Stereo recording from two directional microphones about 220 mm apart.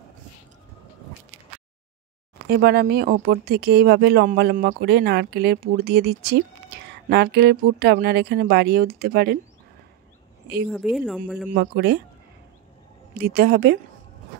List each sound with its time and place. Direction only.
2.4 s speech: 45° right (ahead or behind)
10.7 s speech: centre (ahead or behind)
11.5 s speech: 50° right (ahead or behind)
13.1 s speech: 45° right (ahead or behind)